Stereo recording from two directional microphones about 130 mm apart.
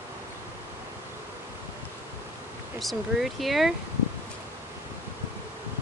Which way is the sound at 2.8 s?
Centre (ahead or behind).